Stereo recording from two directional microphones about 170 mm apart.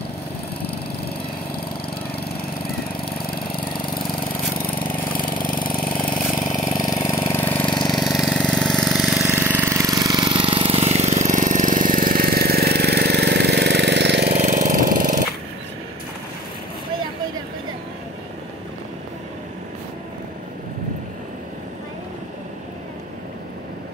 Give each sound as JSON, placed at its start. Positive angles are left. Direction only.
{"t": 3.3, "sound": "engine", "side_deg": 60}
{"t": 4.3, "sound": "lawn mower", "side_deg": 55}
{"t": 5.9, "sound": "engine", "side_deg": 10}
{"t": 6.5, "sound": "engine", "side_deg": 20}
{"t": 7.6, "sound": "engine", "side_deg": 25}
{"t": 7.9, "sound": "engine", "side_deg": 0}
{"t": 9.2, "sound": "vehicle", "side_deg": -10}
{"t": 14.3, "sound": "engine", "side_deg": -45}